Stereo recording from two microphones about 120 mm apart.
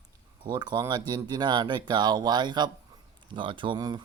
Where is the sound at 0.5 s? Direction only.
35° right (ahead or behind).